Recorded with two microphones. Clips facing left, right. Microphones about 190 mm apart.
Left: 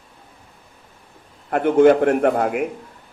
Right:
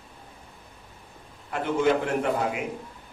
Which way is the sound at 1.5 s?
55° left (ahead or behind).